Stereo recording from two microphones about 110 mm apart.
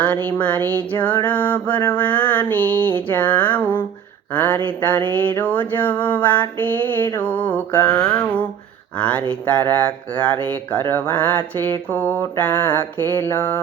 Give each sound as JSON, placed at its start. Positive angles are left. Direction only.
{"t": 0.0, "sound": "speech", "side_deg": 15}
{"t": 7.9, "sound": "a sound", "side_deg": 25}
{"t": 9.0, "sound": "speech", "side_deg": 10}